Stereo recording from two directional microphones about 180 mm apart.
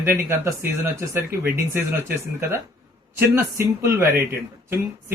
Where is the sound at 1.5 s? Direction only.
15° right (ahead or behind).